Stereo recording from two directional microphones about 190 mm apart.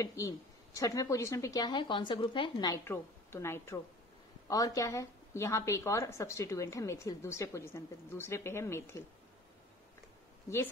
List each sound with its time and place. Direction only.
0.0 s a woman's voice: 15° left (ahead or behind)